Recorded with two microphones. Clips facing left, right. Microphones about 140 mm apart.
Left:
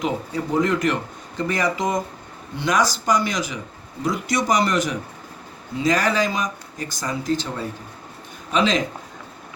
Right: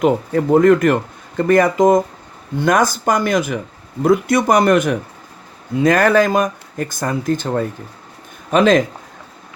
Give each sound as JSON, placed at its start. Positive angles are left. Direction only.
{"t": 0.0, "sound": "speech", "side_deg": -55}